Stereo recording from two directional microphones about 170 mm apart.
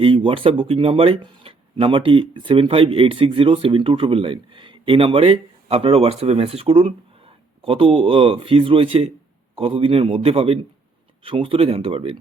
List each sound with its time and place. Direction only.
0.0 s speech: 30° right (ahead or behind)